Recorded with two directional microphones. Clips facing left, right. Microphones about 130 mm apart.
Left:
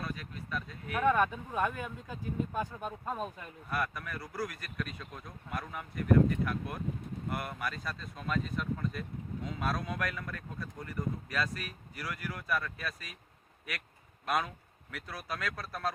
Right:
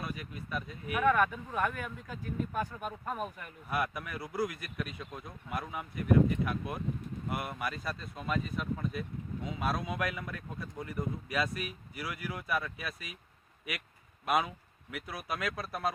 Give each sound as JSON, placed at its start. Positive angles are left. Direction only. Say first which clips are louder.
{"t": 0.0, "sound": "speech", "louder": "even", "side_deg": -15}
{"t": 1.0, "sound": "speech", "louder": "even", "side_deg": 25}
{"t": 3.7, "sound": "speech", "louder": "right 1 dB", "side_deg": -10}
{"t": 14.3, "sound": "speech", "louder": "right 2 dB", "side_deg": -10}